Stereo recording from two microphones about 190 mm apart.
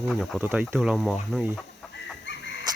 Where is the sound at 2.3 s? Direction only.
70° left (ahead or behind).